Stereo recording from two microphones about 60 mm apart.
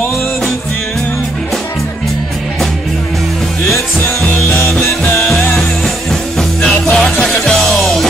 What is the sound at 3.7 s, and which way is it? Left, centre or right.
Music, left.